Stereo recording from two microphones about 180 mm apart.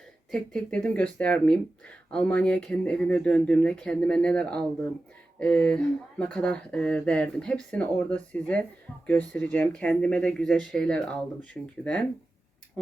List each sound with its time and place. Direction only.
0.3 s speech: 5° left (ahead or behind)